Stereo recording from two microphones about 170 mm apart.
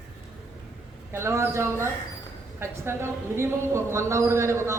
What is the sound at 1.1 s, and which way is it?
A woman's voice, 15° right (ahead or behind).